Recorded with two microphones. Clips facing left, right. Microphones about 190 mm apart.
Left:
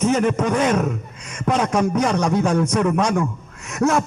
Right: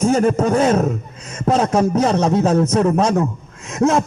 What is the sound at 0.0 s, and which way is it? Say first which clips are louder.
A man's voice: right 3 dB; 30° right (ahead or behind).